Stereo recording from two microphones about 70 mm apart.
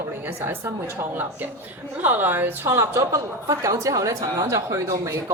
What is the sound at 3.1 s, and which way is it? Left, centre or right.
A woman's voice, right.